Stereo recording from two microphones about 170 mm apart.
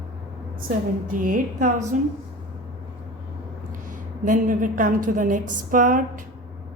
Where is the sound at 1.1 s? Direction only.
55° right (ahead or behind).